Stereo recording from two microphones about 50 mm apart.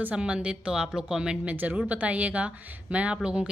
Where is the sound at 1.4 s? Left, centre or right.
Right.